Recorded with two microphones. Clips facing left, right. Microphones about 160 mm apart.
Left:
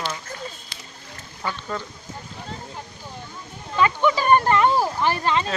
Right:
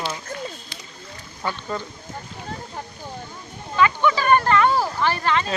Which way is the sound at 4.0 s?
20° left (ahead or behind).